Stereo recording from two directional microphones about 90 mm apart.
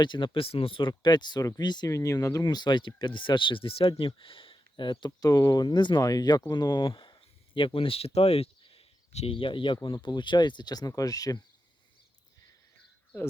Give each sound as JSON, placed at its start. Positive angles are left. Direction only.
{"t": 0.0, "sound": "speech", "side_deg": 60}
{"t": 1.9, "sound": "speech", "side_deg": 40}
{"t": 6.0, "sound": "speech", "side_deg": 45}